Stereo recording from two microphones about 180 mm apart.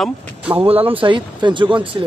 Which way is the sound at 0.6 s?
30° right (ahead or behind).